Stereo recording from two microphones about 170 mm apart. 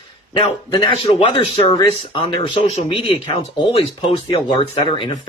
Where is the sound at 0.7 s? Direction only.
30° left (ahead or behind).